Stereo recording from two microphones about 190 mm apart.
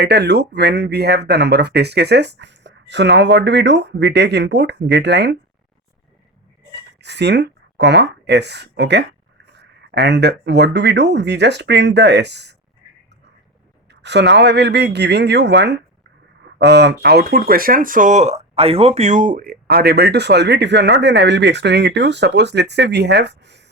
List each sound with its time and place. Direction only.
0.0 s speech: 60° right (ahead or behind)
7.0 s speech: 65° right (ahead or behind)
13.9 s speech: 65° right (ahead or behind)